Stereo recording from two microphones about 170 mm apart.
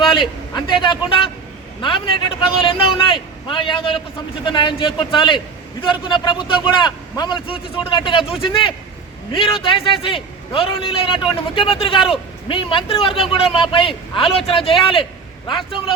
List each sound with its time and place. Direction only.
0.0 s a man's voice: 30° left (ahead or behind)